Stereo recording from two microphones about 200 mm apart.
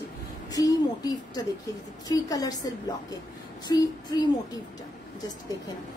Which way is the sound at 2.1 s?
20° left (ahead or behind).